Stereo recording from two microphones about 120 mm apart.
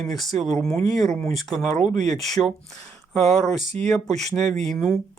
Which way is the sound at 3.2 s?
70° right (ahead or behind).